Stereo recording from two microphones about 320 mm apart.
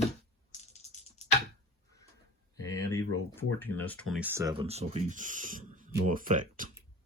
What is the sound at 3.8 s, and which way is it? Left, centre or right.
Speech, centre.